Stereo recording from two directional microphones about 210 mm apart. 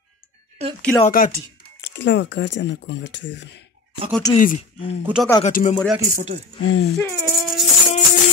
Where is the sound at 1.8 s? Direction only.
60° left (ahead or behind).